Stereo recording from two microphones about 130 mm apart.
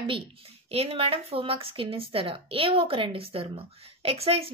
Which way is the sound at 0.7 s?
50° right (ahead or behind).